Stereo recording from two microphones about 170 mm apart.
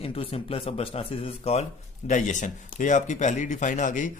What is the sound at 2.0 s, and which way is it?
Speech, 45° left (ahead or behind).